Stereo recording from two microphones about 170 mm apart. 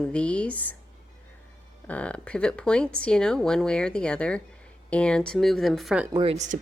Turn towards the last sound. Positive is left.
turn(degrees=-70)  # may be behind; listen again after turning